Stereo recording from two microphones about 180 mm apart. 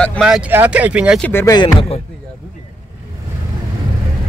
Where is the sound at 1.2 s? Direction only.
10° left (ahead or behind).